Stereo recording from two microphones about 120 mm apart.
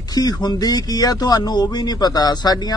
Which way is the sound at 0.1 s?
35° left (ahead or behind).